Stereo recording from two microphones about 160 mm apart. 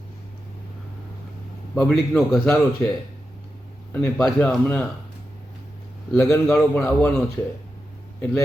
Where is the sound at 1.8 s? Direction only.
5° left (ahead or behind).